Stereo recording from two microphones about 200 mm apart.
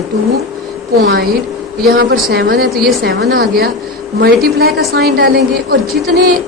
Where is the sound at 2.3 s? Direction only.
50° right (ahead or behind).